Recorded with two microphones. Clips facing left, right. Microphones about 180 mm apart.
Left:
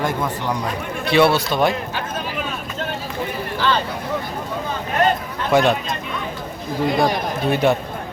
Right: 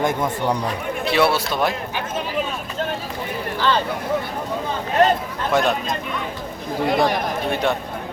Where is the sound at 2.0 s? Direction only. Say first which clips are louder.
Right 2 dB; 25° right (ahead or behind).